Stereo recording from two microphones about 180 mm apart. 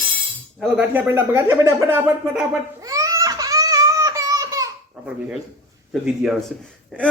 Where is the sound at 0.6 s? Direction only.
10° right (ahead or behind).